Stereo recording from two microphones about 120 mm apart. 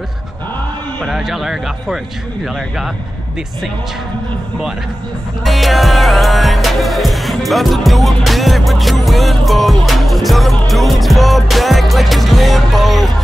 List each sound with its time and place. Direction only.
1.0 s music: centre (ahead or behind)
5.4 s music: centre (ahead or behind)